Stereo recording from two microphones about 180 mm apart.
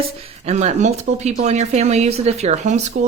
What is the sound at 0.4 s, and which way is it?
Speech, 40° right (ahead or behind).